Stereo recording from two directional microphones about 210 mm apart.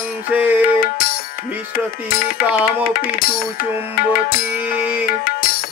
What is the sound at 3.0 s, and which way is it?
Music, 45° left (ahead or behind).